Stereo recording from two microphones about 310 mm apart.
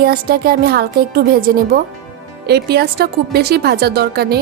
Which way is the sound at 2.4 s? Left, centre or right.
Right.